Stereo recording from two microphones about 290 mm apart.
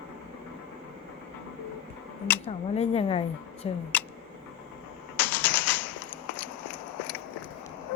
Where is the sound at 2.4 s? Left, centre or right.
Left.